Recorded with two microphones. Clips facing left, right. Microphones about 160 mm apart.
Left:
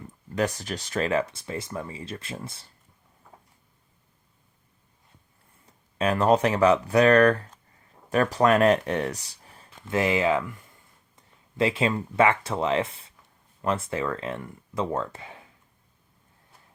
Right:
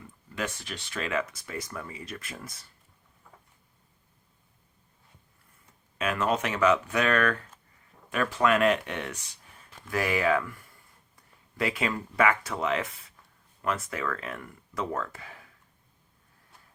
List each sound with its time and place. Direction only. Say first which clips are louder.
0.3 s speech: left 8 dB; 40° left (ahead or behind)
6.0 s speech: left 7 dB; 35° left (ahead or behind)
9.8 s speech: left 3 dB; 25° left (ahead or behind)